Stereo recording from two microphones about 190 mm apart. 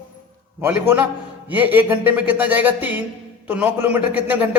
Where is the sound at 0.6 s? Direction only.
10° right (ahead or behind).